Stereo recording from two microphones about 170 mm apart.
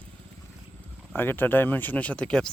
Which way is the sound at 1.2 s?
10° left (ahead or behind).